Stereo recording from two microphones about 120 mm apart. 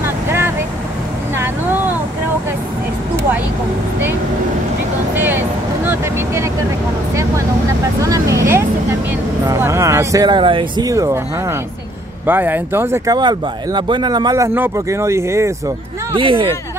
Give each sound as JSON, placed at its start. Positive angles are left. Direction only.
{"t": 0.0, "sound": "vehicle", "side_deg": -20}
{"t": 5.1, "sound": "vehicle", "side_deg": -15}
{"t": 8.0, "sound": "vehicle", "side_deg": -25}
{"t": 9.6, "sound": "a sound", "side_deg": -25}
{"t": 10.2, "sound": "speech", "side_deg": -40}
{"t": 10.8, "sound": "speech", "side_deg": -30}
{"t": 12.3, "sound": "speech", "side_deg": -15}
{"t": 13.1, "sound": "speech", "side_deg": -35}
{"t": 16.1, "sound": "speech", "side_deg": -45}